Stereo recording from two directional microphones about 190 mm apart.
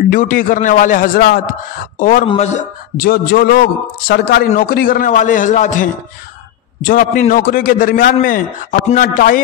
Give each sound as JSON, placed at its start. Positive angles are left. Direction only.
{"t": 0.1, "sound": "a man's voice", "side_deg": 45}
{"t": 3.0, "sound": "a man's voice", "side_deg": 50}